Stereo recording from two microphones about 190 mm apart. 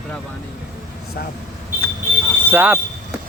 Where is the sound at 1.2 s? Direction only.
55° left (ahead or behind).